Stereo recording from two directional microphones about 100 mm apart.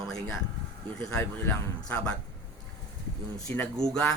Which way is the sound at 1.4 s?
20° left (ahead or behind).